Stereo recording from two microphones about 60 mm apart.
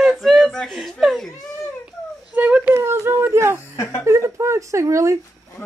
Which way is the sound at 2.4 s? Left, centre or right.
Right.